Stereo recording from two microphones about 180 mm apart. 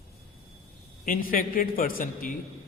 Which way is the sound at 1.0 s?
50° left (ahead or behind).